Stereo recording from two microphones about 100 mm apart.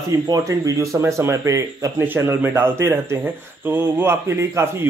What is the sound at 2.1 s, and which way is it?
Speech, 25° right (ahead or behind).